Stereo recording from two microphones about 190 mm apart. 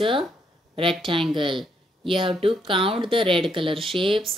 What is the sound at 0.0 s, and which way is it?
Speech, 25° right (ahead or behind).